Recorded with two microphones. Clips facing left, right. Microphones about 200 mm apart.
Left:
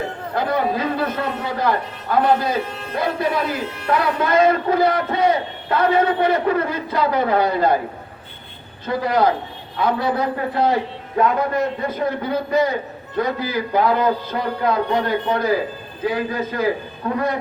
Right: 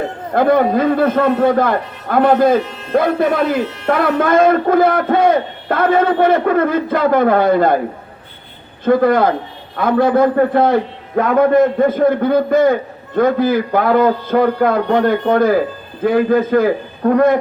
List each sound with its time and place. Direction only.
0.3 s a man's voice: 50° right (ahead or behind)
8.8 s a man's voice: 50° right (ahead or behind)